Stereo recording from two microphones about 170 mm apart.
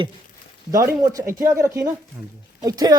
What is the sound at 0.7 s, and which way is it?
A woman's voice, 20° right (ahead or behind).